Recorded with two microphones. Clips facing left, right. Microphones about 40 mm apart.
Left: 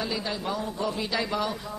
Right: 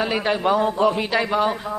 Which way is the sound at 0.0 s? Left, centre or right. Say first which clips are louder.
Right 10 dB; right.